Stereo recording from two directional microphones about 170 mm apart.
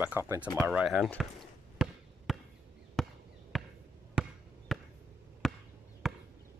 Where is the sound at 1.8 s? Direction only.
5° right (ahead or behind).